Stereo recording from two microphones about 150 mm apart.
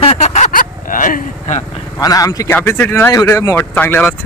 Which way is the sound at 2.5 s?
15° left (ahead or behind).